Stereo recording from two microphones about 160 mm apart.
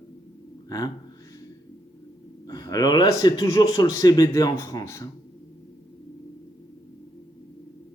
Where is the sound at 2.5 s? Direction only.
25° left (ahead or behind).